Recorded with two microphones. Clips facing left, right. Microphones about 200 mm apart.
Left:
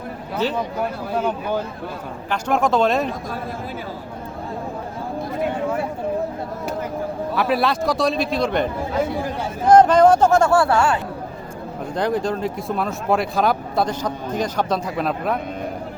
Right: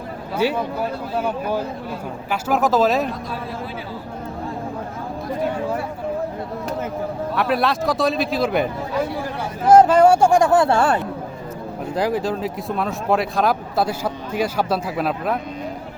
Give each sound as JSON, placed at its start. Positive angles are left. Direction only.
{"t": 0.3, "sound": "speech", "side_deg": -10}
{"t": 7.3, "sound": "speech", "side_deg": 0}
{"t": 9.6, "sound": "speech", "side_deg": -5}
{"t": 10.8, "sound": "speech", "side_deg": -35}
{"t": 11.9, "sound": "speech", "side_deg": -5}